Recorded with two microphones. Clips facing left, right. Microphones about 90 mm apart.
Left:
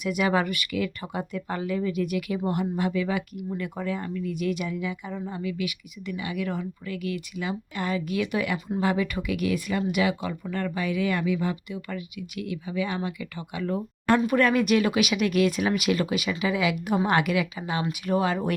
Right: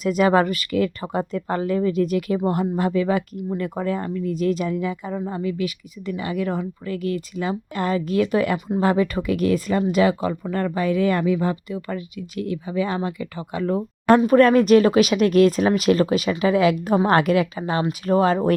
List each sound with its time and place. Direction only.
0.0 s speech: 40° right (ahead or behind)